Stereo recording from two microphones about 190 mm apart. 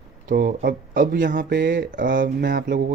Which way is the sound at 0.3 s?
55° right (ahead or behind).